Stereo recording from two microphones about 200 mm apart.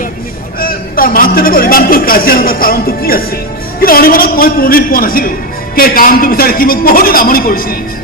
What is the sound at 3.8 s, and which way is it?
A man's voice, 45° left (ahead or behind).